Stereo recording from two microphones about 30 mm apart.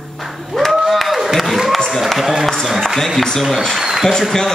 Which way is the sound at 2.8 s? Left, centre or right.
Centre.